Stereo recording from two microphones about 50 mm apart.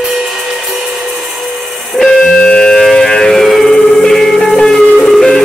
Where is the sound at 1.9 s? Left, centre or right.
Centre.